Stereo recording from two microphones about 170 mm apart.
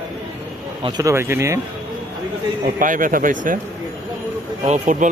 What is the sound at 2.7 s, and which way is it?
Speech, 50° right (ahead or behind).